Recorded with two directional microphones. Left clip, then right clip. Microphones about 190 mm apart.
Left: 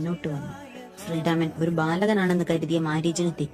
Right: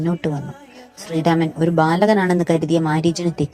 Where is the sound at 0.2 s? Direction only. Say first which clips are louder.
Right 8 dB; 40° right (ahead or behind).